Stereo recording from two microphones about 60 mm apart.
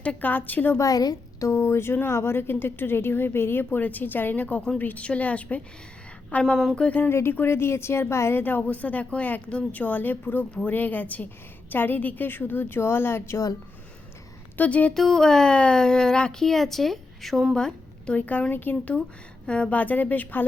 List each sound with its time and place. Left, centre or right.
0.0 s speech: left
0.8 s a woman's voice: left
1.5 s speech: left
7.1 s speech: left
8.4 s speech: left
14.6 s speech: left
14.9 s speech: centre
17.5 s a woman's voice: centre; by 20.4 s left